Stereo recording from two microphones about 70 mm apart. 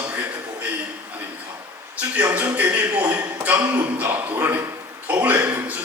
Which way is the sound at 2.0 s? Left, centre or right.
Right.